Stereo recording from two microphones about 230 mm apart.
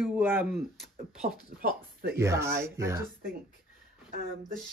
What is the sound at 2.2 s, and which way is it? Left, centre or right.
Speech, centre.